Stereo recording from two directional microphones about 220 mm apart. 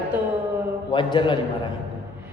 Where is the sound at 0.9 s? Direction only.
20° left (ahead or behind).